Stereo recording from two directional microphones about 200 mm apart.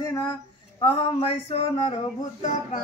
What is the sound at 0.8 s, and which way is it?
Speech, 25° left (ahead or behind).